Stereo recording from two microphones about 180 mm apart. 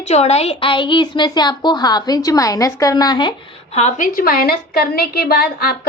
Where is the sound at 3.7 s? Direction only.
40° left (ahead or behind).